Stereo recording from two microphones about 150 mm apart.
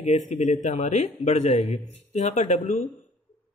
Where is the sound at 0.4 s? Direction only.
55° left (ahead or behind).